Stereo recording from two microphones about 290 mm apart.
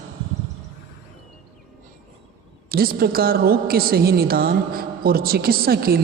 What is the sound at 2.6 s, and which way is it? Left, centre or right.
A woman's voice, right.